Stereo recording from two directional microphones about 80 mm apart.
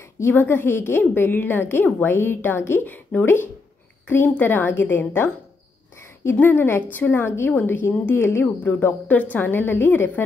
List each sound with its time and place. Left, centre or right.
0.2 s a woman's voice: left
6.3 s a woman's voice: left
8.7 s a woman's voice: centre